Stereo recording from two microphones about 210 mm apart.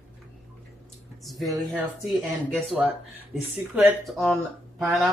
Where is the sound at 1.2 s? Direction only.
Centre (ahead or behind).